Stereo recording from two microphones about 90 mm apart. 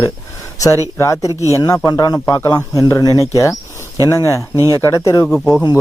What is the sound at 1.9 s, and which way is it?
A man's voice, 45° left (ahead or behind).